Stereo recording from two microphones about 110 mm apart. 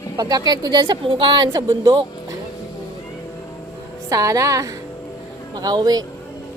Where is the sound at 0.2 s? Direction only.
35° right (ahead or behind).